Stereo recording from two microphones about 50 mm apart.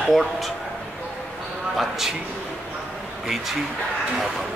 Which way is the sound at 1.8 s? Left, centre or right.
Centre.